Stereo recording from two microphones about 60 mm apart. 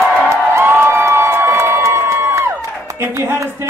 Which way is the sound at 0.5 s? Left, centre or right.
Right.